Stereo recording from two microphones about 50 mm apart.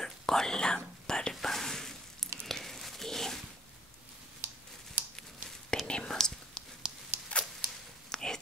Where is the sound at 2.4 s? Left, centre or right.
Centre.